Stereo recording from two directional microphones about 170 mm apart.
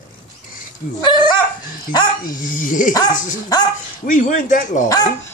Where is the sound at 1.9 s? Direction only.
25° left (ahead or behind).